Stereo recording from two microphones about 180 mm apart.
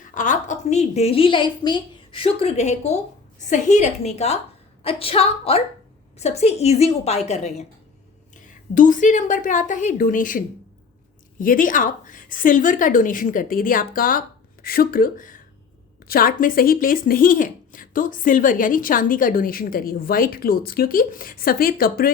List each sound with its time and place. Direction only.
0.1 s a woman's voice: 45° left (ahead or behind)
8.7 s speech: 45° left (ahead or behind)